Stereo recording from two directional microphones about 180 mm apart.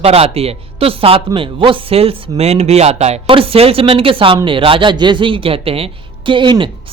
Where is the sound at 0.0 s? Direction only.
35° right (ahead or behind).